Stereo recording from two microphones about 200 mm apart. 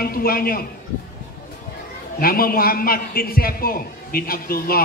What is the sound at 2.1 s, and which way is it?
A man's voice, 45° left (ahead or behind).